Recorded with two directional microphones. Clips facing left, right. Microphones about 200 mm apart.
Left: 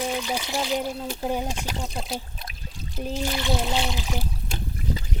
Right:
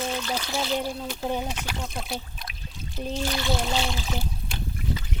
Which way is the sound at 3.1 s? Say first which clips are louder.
Left 1 dB; 15° left (ahead or behind).